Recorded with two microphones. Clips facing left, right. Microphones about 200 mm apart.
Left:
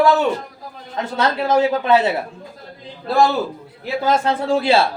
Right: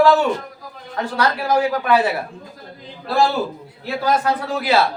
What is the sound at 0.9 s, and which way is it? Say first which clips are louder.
A man's voice: even; 20° left (ahead or behind).